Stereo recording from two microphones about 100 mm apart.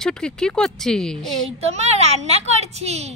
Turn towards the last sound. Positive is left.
turn(degrees=-90)